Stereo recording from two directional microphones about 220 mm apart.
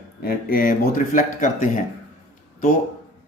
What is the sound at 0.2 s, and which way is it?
A man's voice, 45° left (ahead or behind).